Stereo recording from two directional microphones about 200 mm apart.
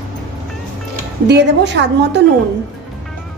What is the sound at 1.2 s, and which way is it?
Speech, 60° right (ahead or behind).